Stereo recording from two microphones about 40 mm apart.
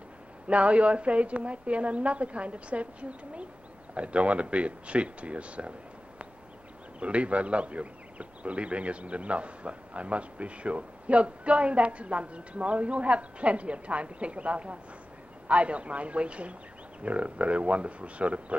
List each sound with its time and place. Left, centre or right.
0.5 s a man's voice: right
7.0 s a man's voice: right